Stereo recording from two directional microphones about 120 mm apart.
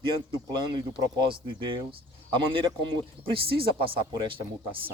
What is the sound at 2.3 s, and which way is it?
Speech, 45° right (ahead or behind).